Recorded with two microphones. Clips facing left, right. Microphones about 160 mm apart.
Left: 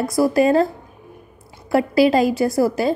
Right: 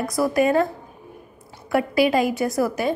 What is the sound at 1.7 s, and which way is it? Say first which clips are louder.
A woman's voice: left 4 dB; 30° left (ahead or behind).